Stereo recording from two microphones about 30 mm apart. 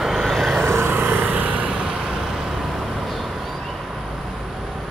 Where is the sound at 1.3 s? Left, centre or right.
Right.